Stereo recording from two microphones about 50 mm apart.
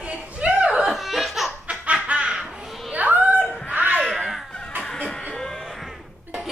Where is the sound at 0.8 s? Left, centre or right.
Centre.